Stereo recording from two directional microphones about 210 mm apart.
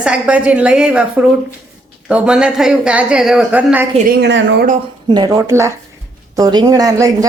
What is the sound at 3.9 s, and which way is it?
Speech, 50° right (ahead or behind).